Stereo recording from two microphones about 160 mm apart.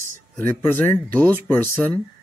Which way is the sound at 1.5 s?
10° left (ahead or behind).